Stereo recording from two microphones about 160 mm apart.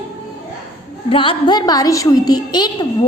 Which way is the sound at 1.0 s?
35° left (ahead or behind).